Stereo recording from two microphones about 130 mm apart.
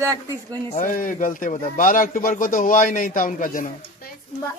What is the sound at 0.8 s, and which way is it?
Speech, 90° left.